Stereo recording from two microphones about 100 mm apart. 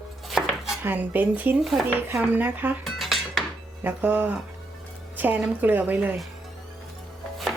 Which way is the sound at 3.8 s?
15° right (ahead or behind).